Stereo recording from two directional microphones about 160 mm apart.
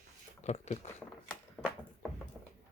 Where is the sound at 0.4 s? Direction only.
45° left (ahead or behind).